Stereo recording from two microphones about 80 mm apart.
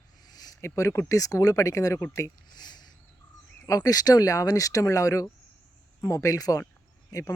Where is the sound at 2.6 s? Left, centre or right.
Left.